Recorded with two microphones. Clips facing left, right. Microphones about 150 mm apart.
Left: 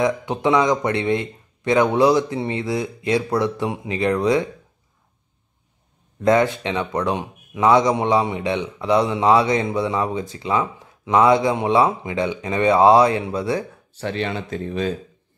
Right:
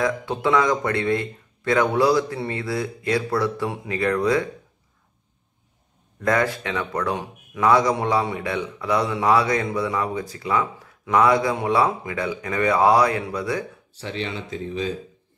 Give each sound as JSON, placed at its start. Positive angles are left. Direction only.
{"t": 0.0, "sound": "speech", "side_deg": 20}
{"t": 6.2, "sound": "speech", "side_deg": 20}
{"t": 14.0, "sound": "speech", "side_deg": 55}